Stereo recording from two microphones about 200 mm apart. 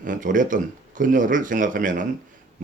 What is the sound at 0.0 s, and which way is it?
A man's voice, 40° right (ahead or behind).